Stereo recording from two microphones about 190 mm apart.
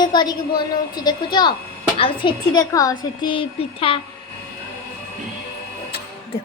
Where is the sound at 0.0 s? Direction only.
20° left (ahead or behind).